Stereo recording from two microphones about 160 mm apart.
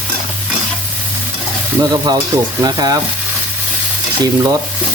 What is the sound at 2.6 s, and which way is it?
Sizzle, 25° right (ahead or behind).